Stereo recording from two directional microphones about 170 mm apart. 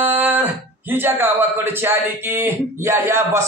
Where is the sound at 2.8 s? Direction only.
15° right (ahead or behind).